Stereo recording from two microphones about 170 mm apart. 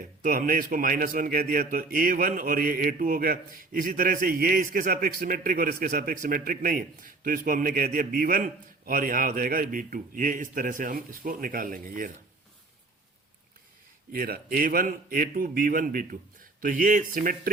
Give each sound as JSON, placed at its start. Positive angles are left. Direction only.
{"t": 0.2, "sound": "a man's voice", "side_deg": -55}
{"t": 14.1, "sound": "a man's voice", "side_deg": -65}